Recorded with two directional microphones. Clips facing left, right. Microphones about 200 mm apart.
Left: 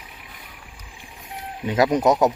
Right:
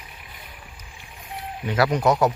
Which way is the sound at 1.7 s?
20° left (ahead or behind).